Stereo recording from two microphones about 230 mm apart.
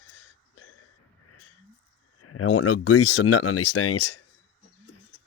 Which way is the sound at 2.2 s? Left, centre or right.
Left.